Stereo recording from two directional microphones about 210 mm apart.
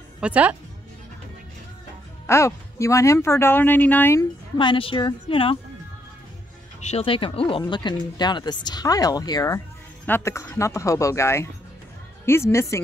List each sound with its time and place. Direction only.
0.2 s a woman's voice: 5° right (ahead or behind)
2.2 s speech: 15° left (ahead or behind)
6.8 s speech: 30° left (ahead or behind); by 12.8 s 15° left (ahead or behind)